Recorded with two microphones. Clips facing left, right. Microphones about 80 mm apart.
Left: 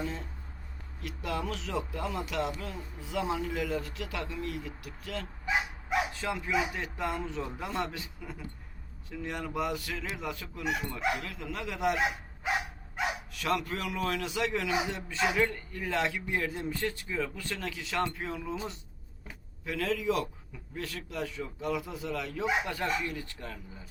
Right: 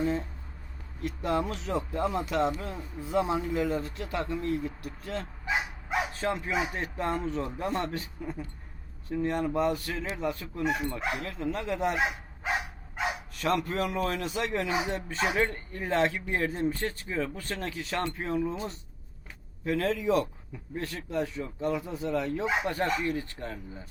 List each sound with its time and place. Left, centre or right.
1.0 s a man's voice: right
13.3 s a man's voice: right